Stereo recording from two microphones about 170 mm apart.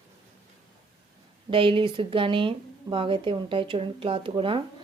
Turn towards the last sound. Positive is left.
turn(degrees=-30)  # may be behind; listen again after turning